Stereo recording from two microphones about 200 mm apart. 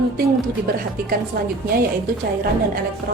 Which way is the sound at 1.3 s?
50° right (ahead or behind).